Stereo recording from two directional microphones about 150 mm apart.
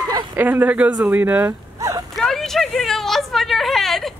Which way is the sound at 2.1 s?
Centre (ahead or behind).